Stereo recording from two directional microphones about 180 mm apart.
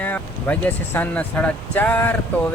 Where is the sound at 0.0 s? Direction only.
10° left (ahead or behind).